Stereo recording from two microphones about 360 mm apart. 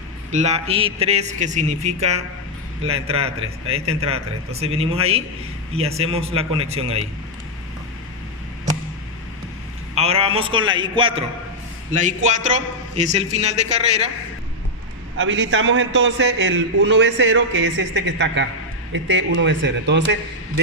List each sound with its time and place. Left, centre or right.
0.3 s a man's voice: centre
9.9 s a man's voice: centre
15.2 s a man's voice: right